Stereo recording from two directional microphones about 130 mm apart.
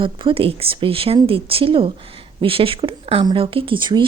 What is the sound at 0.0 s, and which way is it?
Speech, 45° right (ahead or behind).